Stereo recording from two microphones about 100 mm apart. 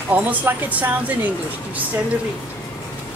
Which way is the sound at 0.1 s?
15° right (ahead or behind).